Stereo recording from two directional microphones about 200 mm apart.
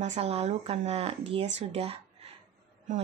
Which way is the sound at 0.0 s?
35° right (ahead or behind).